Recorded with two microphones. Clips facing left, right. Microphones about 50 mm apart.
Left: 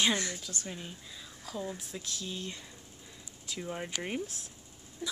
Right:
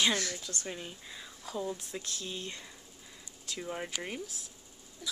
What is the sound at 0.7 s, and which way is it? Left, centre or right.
Speech, centre.